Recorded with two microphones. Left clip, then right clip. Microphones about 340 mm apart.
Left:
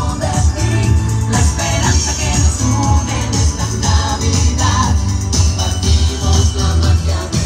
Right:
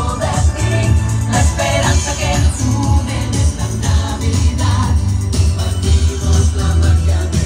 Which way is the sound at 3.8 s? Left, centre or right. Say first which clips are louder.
Left 5 dB; centre.